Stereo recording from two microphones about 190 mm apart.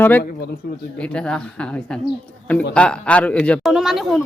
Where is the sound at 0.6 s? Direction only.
55° left (ahead or behind).